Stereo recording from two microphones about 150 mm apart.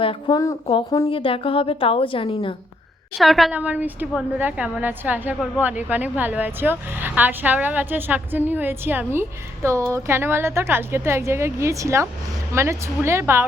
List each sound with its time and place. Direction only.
0.0 s a woman's voice: 35° left (ahead or behind)
3.2 s a woman's voice: centre (ahead or behind); by 13.4 s 15° right (ahead or behind)